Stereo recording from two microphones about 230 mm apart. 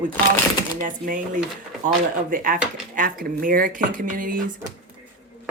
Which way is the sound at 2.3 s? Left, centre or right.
Right.